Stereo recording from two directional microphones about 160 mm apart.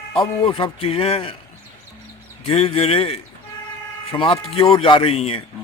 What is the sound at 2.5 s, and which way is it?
A man's voice, 35° left (ahead or behind).